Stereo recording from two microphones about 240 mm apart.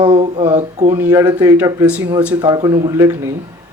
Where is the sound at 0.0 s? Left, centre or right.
Centre.